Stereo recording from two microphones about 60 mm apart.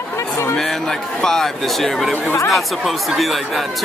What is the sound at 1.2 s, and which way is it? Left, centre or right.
Speech, centre.